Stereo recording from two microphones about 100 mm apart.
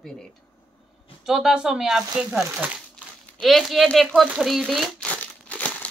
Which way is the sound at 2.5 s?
15° right (ahead or behind).